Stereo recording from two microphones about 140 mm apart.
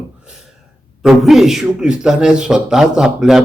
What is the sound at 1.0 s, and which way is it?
A man's voice, centre (ahead or behind).